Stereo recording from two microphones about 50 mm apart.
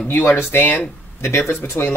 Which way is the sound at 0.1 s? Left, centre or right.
Left.